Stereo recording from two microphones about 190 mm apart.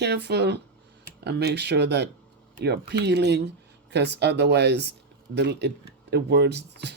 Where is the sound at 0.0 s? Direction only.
60° right (ahead or behind).